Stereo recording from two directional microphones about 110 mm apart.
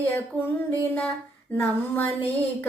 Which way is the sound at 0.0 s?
20° left (ahead or behind).